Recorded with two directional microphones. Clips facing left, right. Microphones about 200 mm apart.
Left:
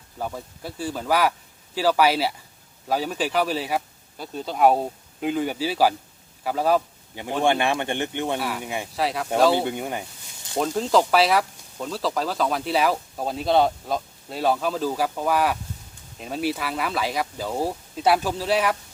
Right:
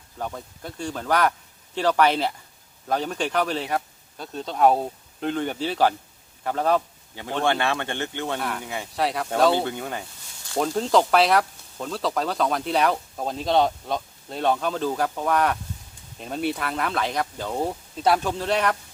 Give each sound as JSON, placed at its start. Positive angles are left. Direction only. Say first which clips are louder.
{"t": 0.2, "sound": "a man's voice", "louder": "left 1 dB", "side_deg": 5}
{"t": 8.4, "sound": "speech", "louder": "left 1 dB", "side_deg": 5}
{"t": 8.6, "sound": "speech", "louder": "left 2 dB", "side_deg": 15}
{"t": 9.0, "sound": "speech", "louder": "right 1 dB", "side_deg": 0}
{"t": 9.6, "sound": "speech", "louder": "left 1 dB", "side_deg": 15}
{"t": 10.6, "sound": "speech", "louder": "even", "side_deg": 0}